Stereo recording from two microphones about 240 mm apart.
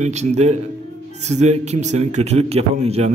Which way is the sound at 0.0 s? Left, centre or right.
Right.